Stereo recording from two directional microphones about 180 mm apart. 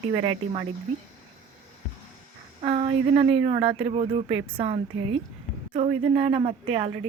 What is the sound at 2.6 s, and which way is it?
A man's voice, 35° right (ahead or behind).